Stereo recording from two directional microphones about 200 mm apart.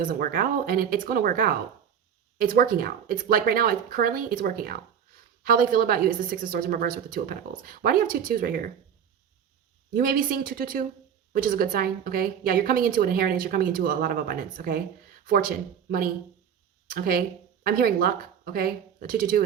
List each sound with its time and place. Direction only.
0.0 s a woman's voice: 45° right (ahead or behind)
9.9 s a woman's voice: 45° right (ahead or behind)